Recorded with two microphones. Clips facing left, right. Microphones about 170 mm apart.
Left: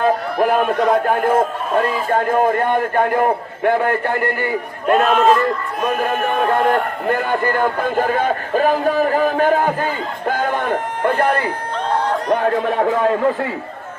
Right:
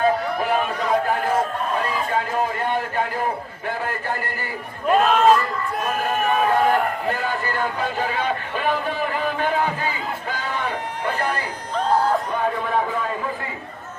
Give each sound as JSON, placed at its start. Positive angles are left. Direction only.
{"t": 0.0, "sound": "a man's voice", "side_deg": 55}
{"t": 5.0, "sound": "a man's voice", "side_deg": 0}
{"t": 7.1, "sound": "speech", "side_deg": 55}
{"t": 10.2, "sound": "music", "side_deg": 50}
{"t": 12.3, "sound": "a man's voice", "side_deg": 85}